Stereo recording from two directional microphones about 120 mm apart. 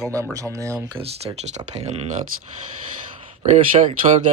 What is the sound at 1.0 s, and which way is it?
Speech, 55° right (ahead or behind).